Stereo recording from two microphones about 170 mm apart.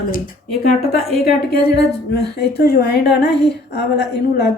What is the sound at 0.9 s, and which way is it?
A woman's voice, 65° left (ahead or behind).